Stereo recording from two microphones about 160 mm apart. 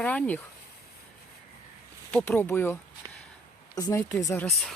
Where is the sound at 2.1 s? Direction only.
10° left (ahead or behind).